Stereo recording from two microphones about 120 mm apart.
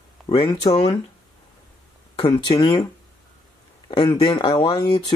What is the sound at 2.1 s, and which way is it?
Speech, 40° left (ahead or behind).